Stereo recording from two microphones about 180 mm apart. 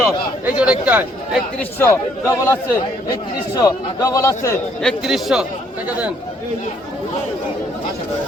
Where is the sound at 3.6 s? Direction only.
20° left (ahead or behind).